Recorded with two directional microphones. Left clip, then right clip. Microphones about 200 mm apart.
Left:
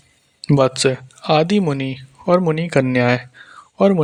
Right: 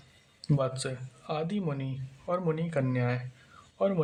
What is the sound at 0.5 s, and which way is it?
Speech, 45° left (ahead or behind).